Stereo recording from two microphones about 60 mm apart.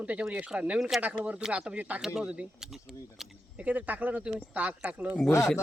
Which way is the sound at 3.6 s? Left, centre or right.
Right.